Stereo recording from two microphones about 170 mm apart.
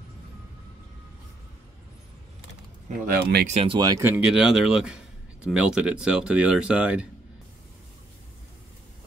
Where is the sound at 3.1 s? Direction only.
70° right (ahead or behind).